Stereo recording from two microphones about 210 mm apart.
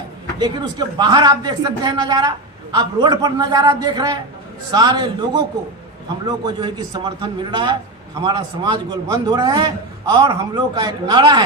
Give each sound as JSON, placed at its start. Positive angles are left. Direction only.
{"t": 0.9, "sound": "a man's voice", "side_deg": -20}